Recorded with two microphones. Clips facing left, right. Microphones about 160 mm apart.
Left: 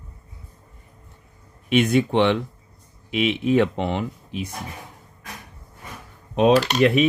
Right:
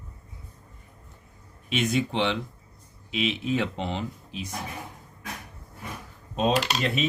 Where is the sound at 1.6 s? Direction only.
60° left (ahead or behind).